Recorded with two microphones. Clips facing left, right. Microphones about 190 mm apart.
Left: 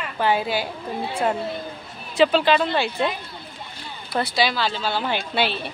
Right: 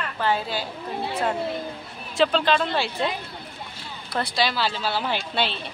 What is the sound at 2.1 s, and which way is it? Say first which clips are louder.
Speech: left 3 dB; 5° left (ahead or behind).